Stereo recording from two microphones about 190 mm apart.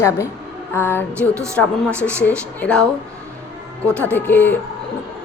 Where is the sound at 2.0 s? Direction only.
5° left (ahead or behind).